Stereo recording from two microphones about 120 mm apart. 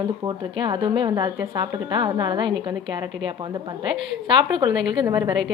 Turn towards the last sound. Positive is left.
turn(degrees=-30)  # may be behind; listen again after turning